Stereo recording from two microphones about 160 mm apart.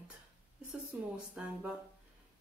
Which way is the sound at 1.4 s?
10° right (ahead or behind).